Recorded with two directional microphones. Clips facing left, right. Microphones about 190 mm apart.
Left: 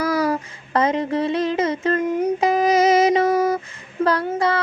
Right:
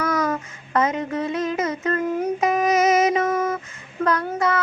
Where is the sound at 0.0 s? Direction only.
30° left (ahead or behind).